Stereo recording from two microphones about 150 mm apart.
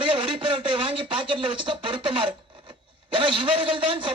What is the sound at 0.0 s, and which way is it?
Speech, 35° right (ahead or behind).